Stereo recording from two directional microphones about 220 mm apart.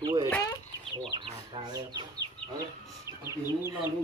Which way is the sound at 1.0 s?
25° right (ahead or behind).